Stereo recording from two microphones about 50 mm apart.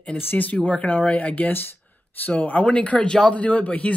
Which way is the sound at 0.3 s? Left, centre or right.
Left.